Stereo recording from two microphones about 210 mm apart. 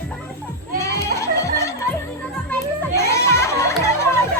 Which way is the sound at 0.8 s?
15° left (ahead or behind).